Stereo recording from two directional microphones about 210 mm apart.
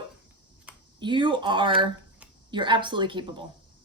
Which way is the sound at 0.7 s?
5° right (ahead or behind).